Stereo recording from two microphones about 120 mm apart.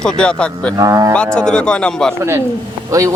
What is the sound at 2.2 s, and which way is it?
Speech, 25° right (ahead or behind).